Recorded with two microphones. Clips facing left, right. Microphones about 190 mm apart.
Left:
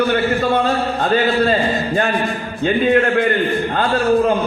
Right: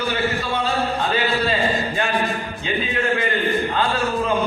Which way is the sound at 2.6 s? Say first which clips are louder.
Left 10 dB; 55° left (ahead or behind).